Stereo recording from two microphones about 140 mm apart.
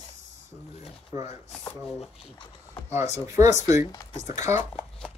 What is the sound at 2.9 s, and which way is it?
Speech, 20° right (ahead or behind).